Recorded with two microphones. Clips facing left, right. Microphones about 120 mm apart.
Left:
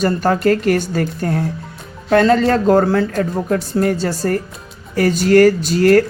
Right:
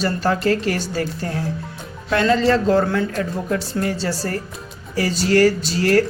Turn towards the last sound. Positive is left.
turn(degrees=45)  # may be behind; listen again after turning